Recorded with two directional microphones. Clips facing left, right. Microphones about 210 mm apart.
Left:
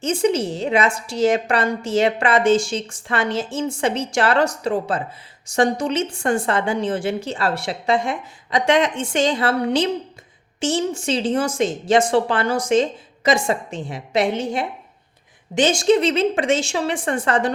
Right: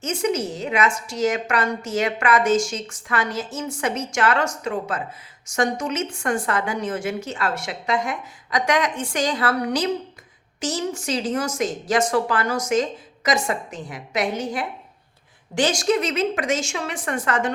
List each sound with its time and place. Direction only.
0.0 s a woman's voice: 30° left (ahead or behind)